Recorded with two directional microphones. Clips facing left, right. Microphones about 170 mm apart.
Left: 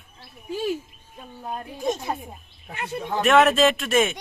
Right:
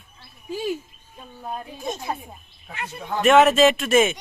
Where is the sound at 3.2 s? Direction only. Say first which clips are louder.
Right 3 dB; centre (ahead or behind).